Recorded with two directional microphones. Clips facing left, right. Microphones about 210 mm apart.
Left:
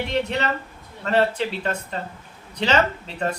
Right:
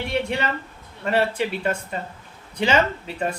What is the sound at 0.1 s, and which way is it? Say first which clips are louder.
A woman's voice: right 1 dB; 10° right (ahead or behind).